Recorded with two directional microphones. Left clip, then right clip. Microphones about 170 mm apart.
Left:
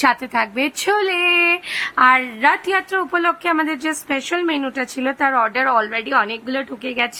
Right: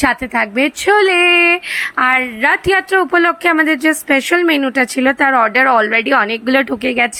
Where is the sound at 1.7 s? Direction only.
15° right (ahead or behind).